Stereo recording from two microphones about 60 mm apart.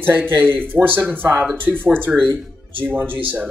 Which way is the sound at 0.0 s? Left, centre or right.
Right.